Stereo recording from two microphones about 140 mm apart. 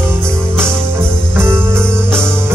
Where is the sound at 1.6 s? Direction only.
5° left (ahead or behind).